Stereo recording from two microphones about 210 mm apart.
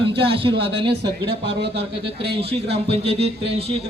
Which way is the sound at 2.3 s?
25° right (ahead or behind).